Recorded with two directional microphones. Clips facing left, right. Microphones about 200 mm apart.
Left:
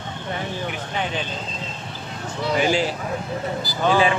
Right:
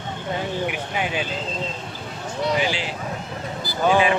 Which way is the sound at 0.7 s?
10° right (ahead or behind).